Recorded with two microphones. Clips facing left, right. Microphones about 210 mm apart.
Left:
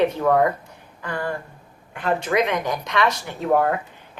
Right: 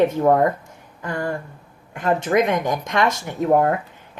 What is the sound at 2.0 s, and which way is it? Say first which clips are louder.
Speech: right 3 dB; 45° right (ahead or behind).